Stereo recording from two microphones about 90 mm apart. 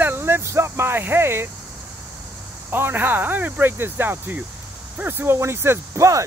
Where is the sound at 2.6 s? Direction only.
25° right (ahead or behind).